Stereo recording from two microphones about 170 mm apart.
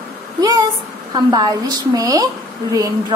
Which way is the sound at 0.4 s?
25° right (ahead or behind).